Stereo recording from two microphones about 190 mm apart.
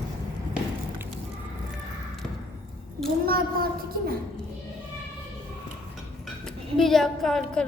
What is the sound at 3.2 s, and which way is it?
Speech, 50° right (ahead or behind).